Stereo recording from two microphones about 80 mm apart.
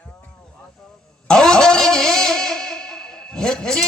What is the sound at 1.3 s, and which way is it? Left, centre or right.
Music, centre.